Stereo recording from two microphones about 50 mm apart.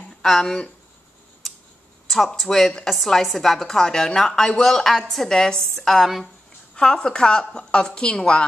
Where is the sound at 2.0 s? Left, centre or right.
Centre.